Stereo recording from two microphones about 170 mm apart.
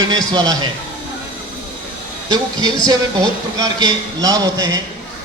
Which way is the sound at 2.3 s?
25° right (ahead or behind).